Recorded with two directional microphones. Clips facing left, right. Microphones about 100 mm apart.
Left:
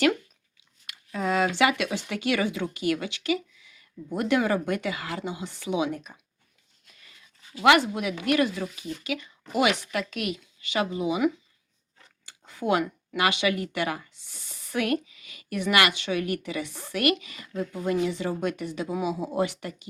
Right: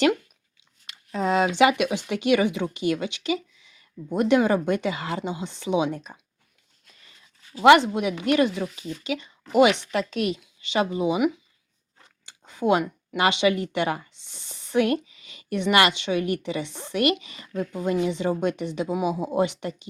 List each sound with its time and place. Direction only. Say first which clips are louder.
0.9 s speech: right 3 dB; 25° right (ahead or behind)
7.5 s speech: right 5 dB; 30° right (ahead or behind)